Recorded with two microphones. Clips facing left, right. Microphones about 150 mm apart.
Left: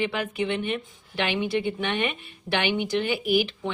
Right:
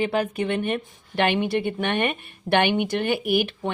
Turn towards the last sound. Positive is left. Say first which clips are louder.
# right 1 dB
turn(degrees=-55)  # may be behind; listen again after turning